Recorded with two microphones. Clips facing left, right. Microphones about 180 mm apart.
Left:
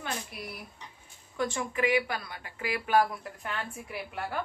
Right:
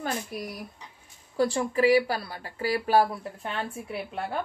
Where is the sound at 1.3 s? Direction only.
35° right (ahead or behind).